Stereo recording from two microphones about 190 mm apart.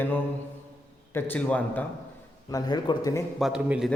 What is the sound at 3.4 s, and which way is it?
Speech, 5° right (ahead or behind).